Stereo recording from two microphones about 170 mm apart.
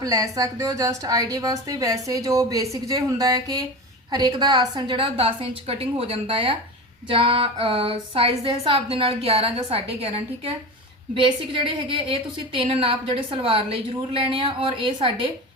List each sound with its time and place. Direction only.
0.0 s a woman's voice: 20° right (ahead or behind)